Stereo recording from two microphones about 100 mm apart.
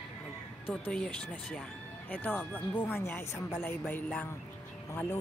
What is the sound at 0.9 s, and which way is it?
Speech, 5° left (ahead or behind).